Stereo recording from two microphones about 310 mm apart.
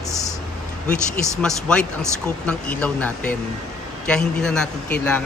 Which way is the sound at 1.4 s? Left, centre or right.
Centre.